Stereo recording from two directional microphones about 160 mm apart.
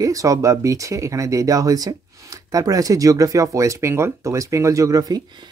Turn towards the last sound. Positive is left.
turn(degrees=-25)  # may be behind; listen again after turning